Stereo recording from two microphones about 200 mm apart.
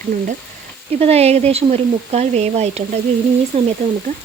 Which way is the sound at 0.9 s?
30° right (ahead or behind).